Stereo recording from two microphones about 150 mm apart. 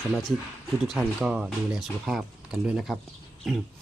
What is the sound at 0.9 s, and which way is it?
Speech, 5° right (ahead or behind).